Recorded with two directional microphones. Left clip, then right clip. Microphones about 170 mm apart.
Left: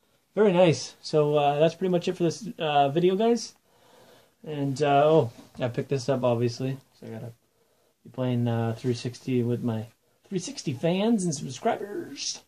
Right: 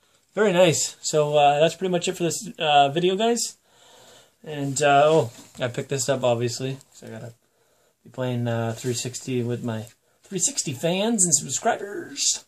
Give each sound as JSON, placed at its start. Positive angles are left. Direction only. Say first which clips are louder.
{"t": 0.3, "sound": "speech", "louder": "right 2 dB", "side_deg": -10}